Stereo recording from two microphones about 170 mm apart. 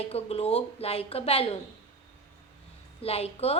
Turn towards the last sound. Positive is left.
turn(degrees=35)  # may be behind; listen again after turning